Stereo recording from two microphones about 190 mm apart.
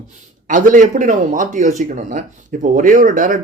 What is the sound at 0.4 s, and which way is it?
Speech, 45° right (ahead or behind).